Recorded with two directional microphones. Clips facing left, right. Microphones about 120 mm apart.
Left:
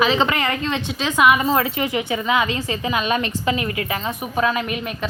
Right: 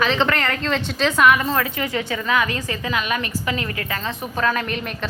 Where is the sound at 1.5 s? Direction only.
20° left (ahead or behind).